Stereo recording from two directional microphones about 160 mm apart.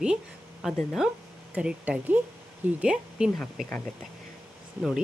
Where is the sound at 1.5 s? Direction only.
10° right (ahead or behind).